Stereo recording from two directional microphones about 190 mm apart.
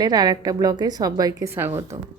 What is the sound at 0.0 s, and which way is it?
Speech, 20° right (ahead or behind).